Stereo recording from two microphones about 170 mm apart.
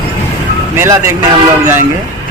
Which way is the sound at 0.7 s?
15° right (ahead or behind).